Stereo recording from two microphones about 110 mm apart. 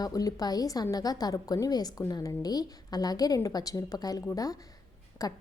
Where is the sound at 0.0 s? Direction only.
35° left (ahead or behind).